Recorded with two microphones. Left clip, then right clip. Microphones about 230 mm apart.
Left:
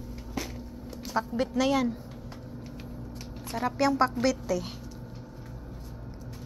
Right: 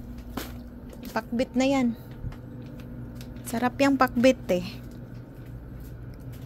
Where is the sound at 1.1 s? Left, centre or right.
Right.